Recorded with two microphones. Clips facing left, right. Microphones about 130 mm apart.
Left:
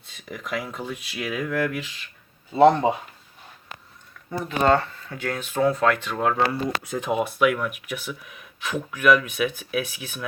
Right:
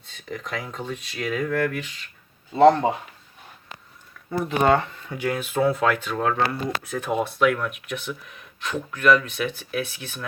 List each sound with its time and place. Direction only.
0.3 s speech: 10° left (ahead or behind)
4.4 s speech: 15° right (ahead or behind); by 6.3 s centre (ahead or behind)
6.5 s speech: 15° left (ahead or behind)